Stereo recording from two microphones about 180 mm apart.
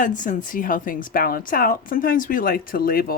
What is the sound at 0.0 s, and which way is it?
A woman's voice, 45° left (ahead or behind).